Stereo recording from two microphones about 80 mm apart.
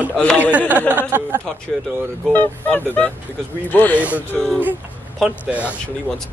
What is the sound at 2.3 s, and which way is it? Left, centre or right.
Speech, left.